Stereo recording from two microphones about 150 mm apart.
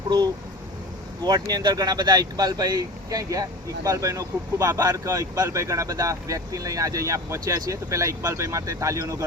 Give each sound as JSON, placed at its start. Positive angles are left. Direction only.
{"t": 1.2, "sound": "speech", "side_deg": -25}